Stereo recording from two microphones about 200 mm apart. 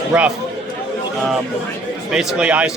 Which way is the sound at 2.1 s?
5° right (ahead or behind).